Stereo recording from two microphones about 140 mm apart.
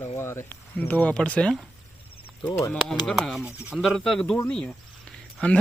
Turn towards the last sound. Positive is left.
turn(degrees=10)  # may be behind; listen again after turning